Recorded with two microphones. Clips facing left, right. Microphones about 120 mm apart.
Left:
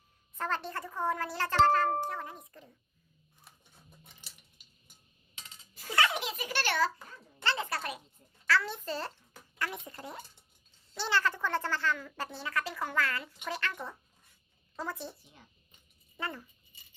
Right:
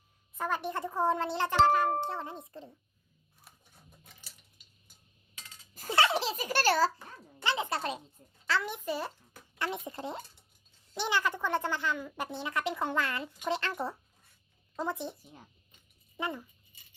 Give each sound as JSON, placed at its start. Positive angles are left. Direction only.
{"t": 0.3, "sound": "speech", "side_deg": -10}
{"t": 5.3, "sound": "a sound", "side_deg": 25}
{"t": 5.9, "sound": "a sound", "side_deg": -30}
{"t": 7.4, "sound": "a child's voice", "side_deg": -15}
{"t": 9.6, "sound": "speech", "side_deg": -25}
{"t": 14.8, "sound": "speech", "side_deg": -20}
{"t": 15.2, "sound": "speech", "side_deg": -40}
{"t": 16.1, "sound": "a child's voice", "side_deg": -15}